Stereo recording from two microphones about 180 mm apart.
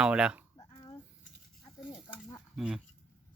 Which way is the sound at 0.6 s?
25° left (ahead or behind).